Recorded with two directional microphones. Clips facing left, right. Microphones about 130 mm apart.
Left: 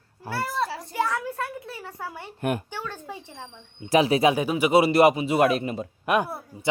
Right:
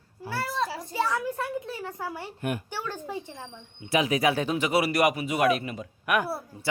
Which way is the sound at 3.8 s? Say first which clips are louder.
Left 5 dB; 35° left (ahead or behind).